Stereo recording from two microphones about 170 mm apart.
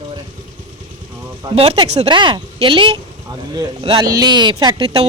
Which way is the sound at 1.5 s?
35° right (ahead or behind).